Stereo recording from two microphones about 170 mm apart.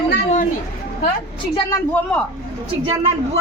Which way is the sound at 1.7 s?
10° left (ahead or behind).